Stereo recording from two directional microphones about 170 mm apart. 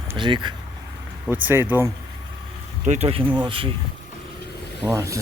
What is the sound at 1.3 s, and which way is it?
Speech, 10° right (ahead or behind).